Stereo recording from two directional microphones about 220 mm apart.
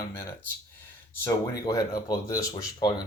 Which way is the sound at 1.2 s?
15° left (ahead or behind).